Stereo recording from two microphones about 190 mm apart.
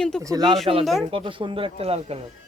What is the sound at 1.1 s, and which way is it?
Speech, 25° right (ahead or behind).